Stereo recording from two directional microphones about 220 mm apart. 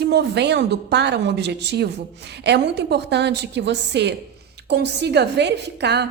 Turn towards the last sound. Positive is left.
turn(degrees=-50)  # may be behind; listen again after turning